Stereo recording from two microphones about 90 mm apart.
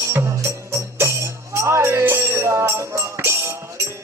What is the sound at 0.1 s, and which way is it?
Music, 30° right (ahead or behind).